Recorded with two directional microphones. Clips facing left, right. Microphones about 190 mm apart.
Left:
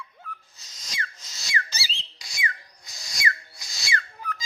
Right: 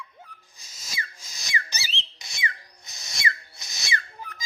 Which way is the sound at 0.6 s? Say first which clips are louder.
Right 1 dB; 10° right (ahead or behind).